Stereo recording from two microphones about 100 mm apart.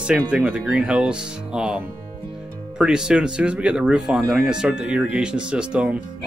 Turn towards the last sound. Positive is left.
turn(degrees=-10)  # may be behind; listen again after turning